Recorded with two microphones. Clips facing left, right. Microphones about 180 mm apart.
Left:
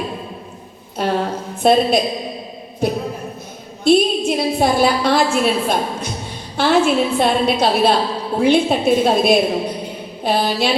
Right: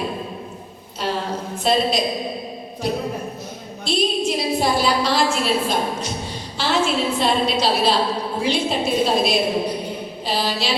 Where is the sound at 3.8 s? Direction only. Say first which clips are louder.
Left 7 dB; 55° left (ahead or behind).